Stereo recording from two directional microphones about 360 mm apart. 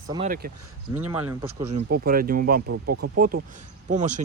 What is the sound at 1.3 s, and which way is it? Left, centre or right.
Speech, centre.